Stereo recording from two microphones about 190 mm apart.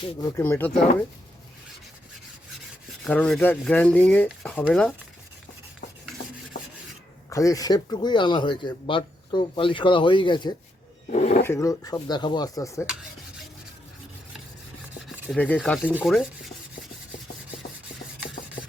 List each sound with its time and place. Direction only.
0.0 s speech: 15° left (ahead or behind)
3.0 s speech: 5° left (ahead or behind)
4.7 s stir: 5° left (ahead or behind)
7.3 s speech: 15° left (ahead or behind)
11.1 s speech: 40° left (ahead or behind)
11.4 s speech: 15° left (ahead or behind)
15.3 s speech: 10° left (ahead or behind)
15.9 s rub: 10° right (ahead or behind)